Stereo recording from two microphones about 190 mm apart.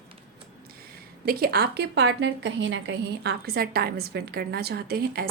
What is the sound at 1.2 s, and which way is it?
A woman's voice, 55° right (ahead or behind).